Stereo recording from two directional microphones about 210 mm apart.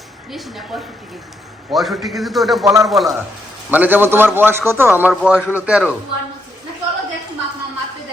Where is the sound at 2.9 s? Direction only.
Centre (ahead or behind).